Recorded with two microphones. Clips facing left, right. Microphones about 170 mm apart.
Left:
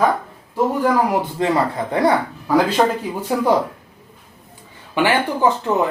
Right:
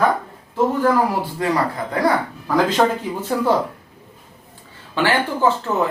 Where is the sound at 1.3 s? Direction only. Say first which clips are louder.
Left 2 dB; 25° left (ahead or behind).